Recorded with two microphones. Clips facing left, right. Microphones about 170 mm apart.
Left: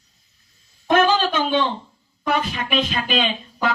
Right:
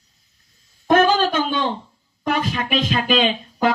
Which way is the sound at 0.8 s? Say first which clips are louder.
Right 2 dB; 45° right (ahead or behind).